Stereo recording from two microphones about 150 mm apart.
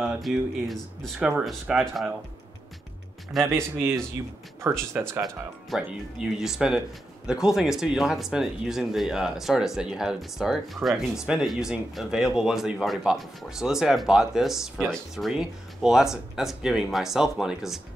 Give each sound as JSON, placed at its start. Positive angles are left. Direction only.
{"t": 0.0, "sound": "speech", "side_deg": 0}
{"t": 3.3, "sound": "speech", "side_deg": 0}
{"t": 4.9, "sound": "speech", "side_deg": -10}